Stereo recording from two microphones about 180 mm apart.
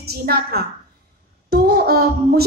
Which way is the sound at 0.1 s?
60° right (ahead or behind).